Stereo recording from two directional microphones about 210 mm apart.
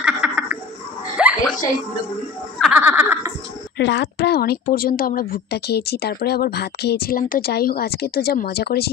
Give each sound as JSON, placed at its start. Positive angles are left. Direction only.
{"t": 0.0, "sound": "a sound", "side_deg": -5}
{"t": 2.6, "sound": "giggle", "side_deg": -5}
{"t": 3.7, "sound": "speech", "side_deg": 55}